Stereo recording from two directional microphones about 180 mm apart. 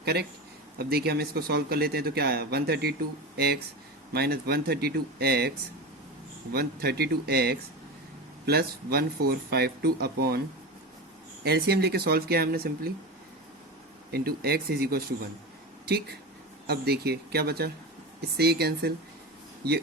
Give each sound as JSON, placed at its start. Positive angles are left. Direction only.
{"t": 0.0, "sound": "speech", "side_deg": -60}
{"t": 11.4, "sound": "speech", "side_deg": -60}
{"t": 14.1, "sound": "speech", "side_deg": -60}